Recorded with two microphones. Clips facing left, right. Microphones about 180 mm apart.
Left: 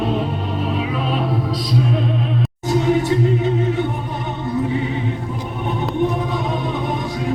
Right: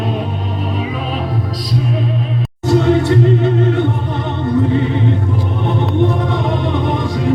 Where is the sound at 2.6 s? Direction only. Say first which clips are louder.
Right 5 dB; 70° right (ahead or behind).